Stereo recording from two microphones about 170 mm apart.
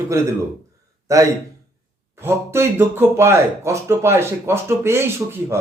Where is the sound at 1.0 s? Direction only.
20° right (ahead or behind).